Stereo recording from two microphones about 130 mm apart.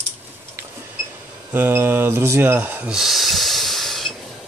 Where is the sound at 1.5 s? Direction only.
15° right (ahead or behind).